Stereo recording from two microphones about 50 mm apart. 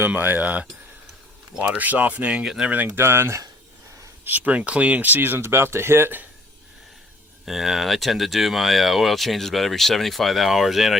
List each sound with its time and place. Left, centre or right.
0.1 s speech: right
2.4 s speech: centre
2.8 s speech: right
4.2 s speech: right
7.4 s speech: centre